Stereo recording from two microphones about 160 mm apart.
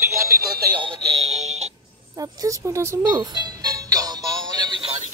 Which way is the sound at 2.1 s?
20° right (ahead or behind).